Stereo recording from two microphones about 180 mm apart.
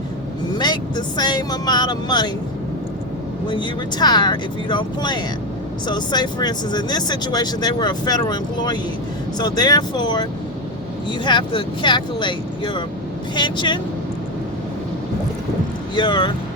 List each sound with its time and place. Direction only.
0.5 s speech: 25° left (ahead or behind)
3.5 s speech: 25° left (ahead or behind)
16.0 s speech: 25° left (ahead or behind)